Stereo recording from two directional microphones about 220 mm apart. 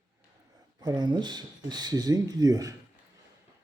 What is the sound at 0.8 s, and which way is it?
Speech, 20° right (ahead or behind).